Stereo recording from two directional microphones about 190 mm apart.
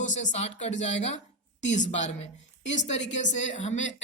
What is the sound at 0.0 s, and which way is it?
A woman's voice, 40° left (ahead or behind).